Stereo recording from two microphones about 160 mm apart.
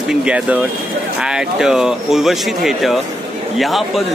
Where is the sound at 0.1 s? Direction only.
5° right (ahead or behind).